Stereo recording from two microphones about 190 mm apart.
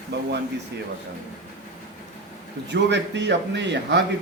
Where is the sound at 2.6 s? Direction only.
65° right (ahead or behind).